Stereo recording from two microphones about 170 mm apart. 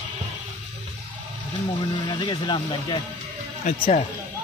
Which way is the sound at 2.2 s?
25° left (ahead or behind).